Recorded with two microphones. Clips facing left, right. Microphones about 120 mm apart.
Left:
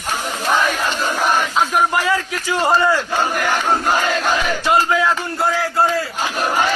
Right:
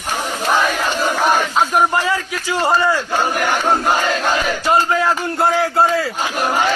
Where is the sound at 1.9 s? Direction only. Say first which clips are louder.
Even; 25° right (ahead or behind).